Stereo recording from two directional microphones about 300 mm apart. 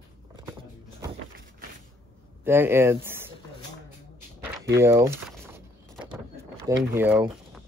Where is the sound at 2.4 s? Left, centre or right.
Centre.